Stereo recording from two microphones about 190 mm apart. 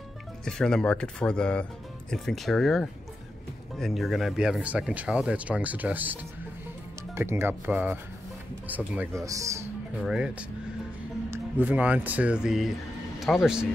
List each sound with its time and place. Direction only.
0.5 s speech: 5° left (ahead or behind)
7.2 s speech: 15° right (ahead or behind)
10.0 s speech: 5° right (ahead or behind)